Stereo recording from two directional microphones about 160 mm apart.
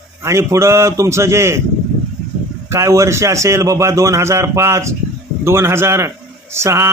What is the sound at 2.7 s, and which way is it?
A man's voice, 20° right (ahead or behind).